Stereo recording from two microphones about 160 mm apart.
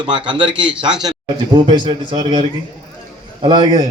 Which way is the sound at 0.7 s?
5° right (ahead or behind).